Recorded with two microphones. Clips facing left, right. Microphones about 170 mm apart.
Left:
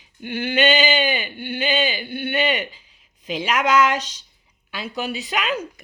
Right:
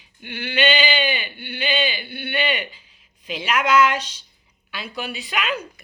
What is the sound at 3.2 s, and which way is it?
Speech, 40° left (ahead or behind).